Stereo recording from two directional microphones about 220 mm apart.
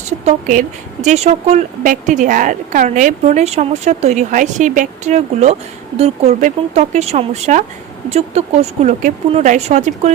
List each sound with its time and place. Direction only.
0.1 s a woman's voice: 35° right (ahead or behind)